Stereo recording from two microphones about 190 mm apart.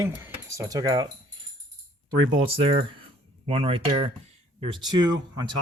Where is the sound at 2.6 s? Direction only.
25° right (ahead or behind).